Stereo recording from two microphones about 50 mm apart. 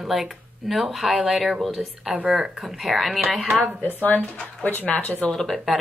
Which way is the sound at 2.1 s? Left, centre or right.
Right.